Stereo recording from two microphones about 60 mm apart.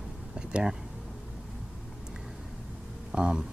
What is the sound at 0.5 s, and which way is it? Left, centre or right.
Speech, centre.